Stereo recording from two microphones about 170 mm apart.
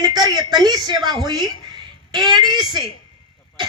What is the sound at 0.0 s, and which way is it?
Speech, 25° right (ahead or behind).